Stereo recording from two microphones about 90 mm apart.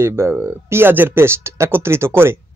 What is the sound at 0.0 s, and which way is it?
Speech, 30° right (ahead or behind).